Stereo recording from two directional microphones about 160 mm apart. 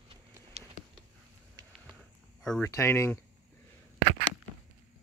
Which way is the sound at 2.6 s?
15° left (ahead or behind).